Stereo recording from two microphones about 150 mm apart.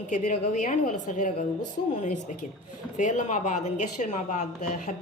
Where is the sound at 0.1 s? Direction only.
55° left (ahead or behind).